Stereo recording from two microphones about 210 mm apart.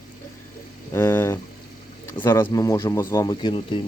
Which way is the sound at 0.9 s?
10° left (ahead or behind).